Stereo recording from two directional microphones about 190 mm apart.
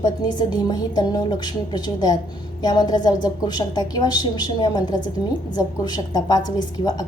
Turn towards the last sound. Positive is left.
turn(degrees=20)  # may be behind; listen again after turning